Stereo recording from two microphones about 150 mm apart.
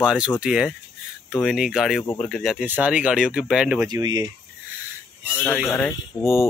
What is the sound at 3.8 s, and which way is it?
Speech, 25° right (ahead or behind).